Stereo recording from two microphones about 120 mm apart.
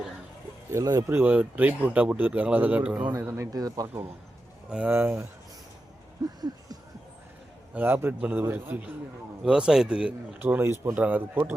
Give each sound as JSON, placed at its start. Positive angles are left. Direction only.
{"t": 0.7, "sound": "speech", "side_deg": -30}
{"t": 1.1, "sound": "speech", "side_deg": -15}
{"t": 4.9, "sound": "speech", "side_deg": -20}
{"t": 7.7, "sound": "speech", "side_deg": -15}